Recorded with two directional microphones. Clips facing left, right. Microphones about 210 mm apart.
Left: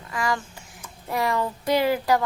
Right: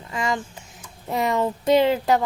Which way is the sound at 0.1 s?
25° right (ahead or behind).